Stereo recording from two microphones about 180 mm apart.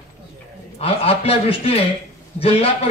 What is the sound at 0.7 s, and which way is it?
Speech, 30° left (ahead or behind).